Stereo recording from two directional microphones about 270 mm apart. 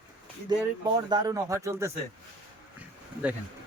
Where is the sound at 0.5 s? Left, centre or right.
Centre.